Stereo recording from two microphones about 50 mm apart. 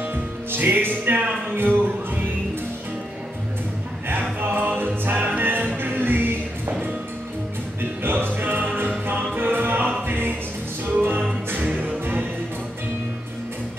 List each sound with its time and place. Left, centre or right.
0.0 s music: right
4.4 s music: right
8.0 s music: right